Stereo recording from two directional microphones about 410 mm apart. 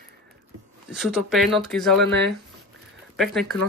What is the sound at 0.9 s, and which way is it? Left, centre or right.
Speech, centre.